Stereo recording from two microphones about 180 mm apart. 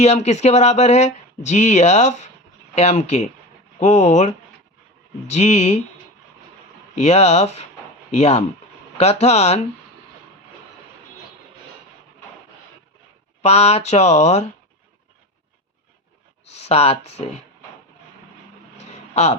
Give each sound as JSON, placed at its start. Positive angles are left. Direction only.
{"t": 0.0, "sound": "speech", "side_deg": 35}
{"t": 6.9, "sound": "speech", "side_deg": 35}
{"t": 13.4, "sound": "speech", "side_deg": 35}
{"t": 16.5, "sound": "speech", "side_deg": 35}
{"t": 19.1, "sound": "speech", "side_deg": 35}